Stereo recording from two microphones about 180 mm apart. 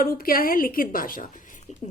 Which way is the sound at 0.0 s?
55° left (ahead or behind).